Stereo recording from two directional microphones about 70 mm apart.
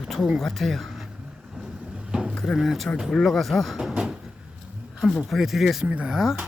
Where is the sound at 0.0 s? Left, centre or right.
Centre.